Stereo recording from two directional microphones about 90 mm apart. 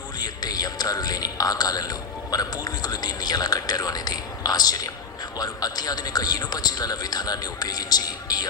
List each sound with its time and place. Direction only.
0.2 s a man's voice: 45° left (ahead or behind)